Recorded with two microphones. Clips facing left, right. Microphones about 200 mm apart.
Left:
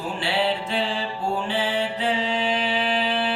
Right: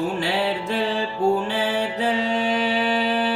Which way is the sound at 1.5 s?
45° right (ahead or behind).